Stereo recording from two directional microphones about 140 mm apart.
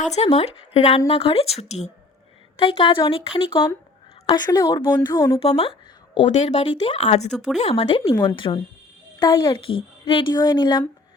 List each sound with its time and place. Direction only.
0.0 s speech: 50° left (ahead or behind)
2.6 s a woman's voice: 40° left (ahead or behind)
5.4 s speech: 45° left (ahead or behind)
7.3 s speech: 5° left (ahead or behind)
7.6 s speech: 45° left (ahead or behind)
8.0 s a woman's voice: 20° left (ahead or behind)
8.4 s speech: 35° left (ahead or behind)